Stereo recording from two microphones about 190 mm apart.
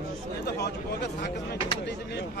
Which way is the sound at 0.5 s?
60° left (ahead or behind).